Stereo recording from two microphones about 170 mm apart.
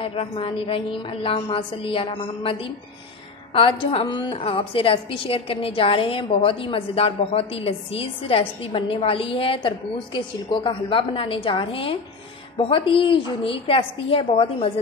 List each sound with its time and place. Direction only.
0.0 s a woman's voice: 35° left (ahead or behind)